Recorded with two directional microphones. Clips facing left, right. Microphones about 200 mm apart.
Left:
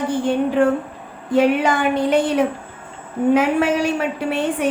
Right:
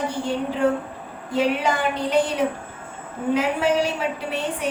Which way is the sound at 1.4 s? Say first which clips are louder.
Left 5 dB; 55° left (ahead or behind).